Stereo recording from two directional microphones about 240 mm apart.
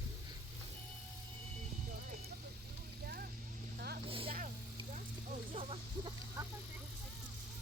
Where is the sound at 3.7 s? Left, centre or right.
Right.